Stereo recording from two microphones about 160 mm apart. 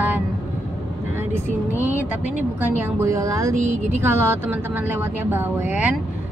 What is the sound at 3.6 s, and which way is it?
Speech, 50° right (ahead or behind).